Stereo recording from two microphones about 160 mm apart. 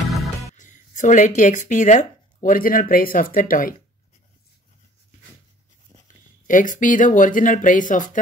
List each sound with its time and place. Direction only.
0.1 s music: centre (ahead or behind)
0.6 s speech: 50° left (ahead or behind)
6.0 s speech: 55° left (ahead or behind)